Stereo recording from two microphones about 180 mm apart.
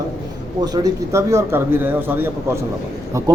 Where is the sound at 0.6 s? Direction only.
20° right (ahead or behind).